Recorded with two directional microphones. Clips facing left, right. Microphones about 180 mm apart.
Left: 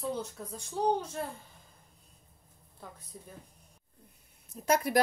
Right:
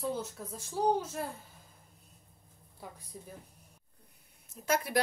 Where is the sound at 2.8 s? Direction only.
10° right (ahead or behind).